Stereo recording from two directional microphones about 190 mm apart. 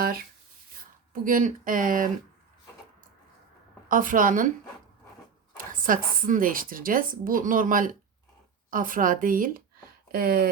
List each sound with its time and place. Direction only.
1.1 s speech: 45° right (ahead or behind)
3.8 s speech: 45° right (ahead or behind)
5.5 s speech: 45° right (ahead or behind)